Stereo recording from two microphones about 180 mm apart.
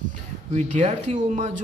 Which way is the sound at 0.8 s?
40° right (ahead or behind).